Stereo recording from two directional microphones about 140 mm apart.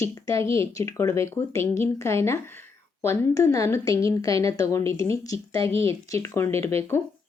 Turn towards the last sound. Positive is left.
turn(degrees=20)  # may be behind; listen again after turning